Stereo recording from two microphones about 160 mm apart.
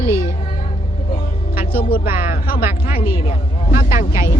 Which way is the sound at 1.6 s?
65° left (ahead or behind).